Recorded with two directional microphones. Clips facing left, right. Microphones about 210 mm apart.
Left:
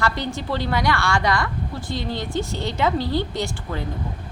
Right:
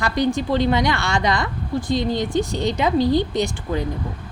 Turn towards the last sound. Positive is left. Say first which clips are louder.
# right 5 dB
turn(degrees=-15)  # may be behind; listen again after turning